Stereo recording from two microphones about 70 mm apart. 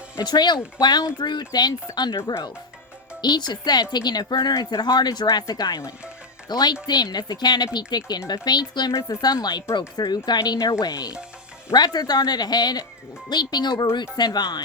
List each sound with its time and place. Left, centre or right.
0.2 s speech: left
8.3 s speech: left
8.9 s speech: left
10.6 s speech: left
11.7 s speech: left
13.3 s speech: left